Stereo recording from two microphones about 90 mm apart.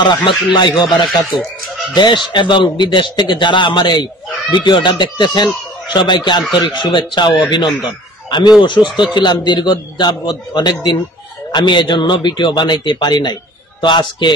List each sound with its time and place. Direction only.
0.2 s a man's voice: 60° left (ahead or behind)
2.0 s a man's voice: 60° left (ahead or behind)